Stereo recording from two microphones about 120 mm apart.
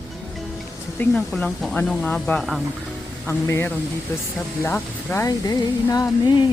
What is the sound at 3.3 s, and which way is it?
Speech, 20° left (ahead or behind).